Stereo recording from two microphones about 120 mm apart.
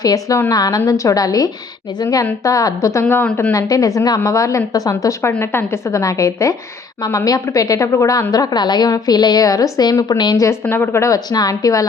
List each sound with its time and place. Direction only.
0.0 s a woman's voice: 30° left (ahead or behind)
3.5 s a woman's voice: 30° left (ahead or behind)
10.4 s a woman's voice: 20° left (ahead or behind)